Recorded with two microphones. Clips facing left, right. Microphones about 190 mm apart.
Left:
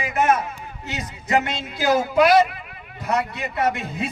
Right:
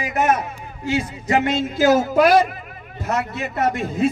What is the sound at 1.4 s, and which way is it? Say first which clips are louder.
A man's voice: right 7 dB; 45° right (ahead or behind).